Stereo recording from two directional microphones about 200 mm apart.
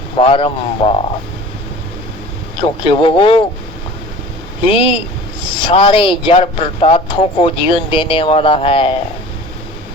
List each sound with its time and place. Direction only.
0.2 s speech: 30° left (ahead or behind)
2.6 s speech: 25° left (ahead or behind)
4.7 s speech: 25° left (ahead or behind)